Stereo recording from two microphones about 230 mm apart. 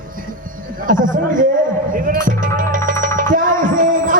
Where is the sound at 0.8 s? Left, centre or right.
Right.